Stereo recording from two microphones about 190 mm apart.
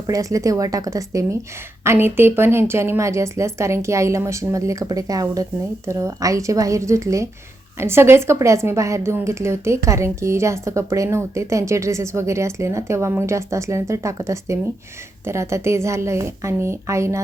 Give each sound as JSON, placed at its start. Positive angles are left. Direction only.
{"t": 0.1, "sound": "a woman's voice", "side_deg": -15}